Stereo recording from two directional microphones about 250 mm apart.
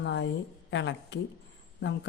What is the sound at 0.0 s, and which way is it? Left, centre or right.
A woman's voice, left.